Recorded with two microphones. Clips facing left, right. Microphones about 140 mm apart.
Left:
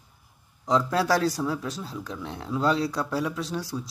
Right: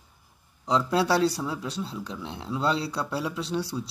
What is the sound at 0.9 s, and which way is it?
Speech, 25° right (ahead or behind).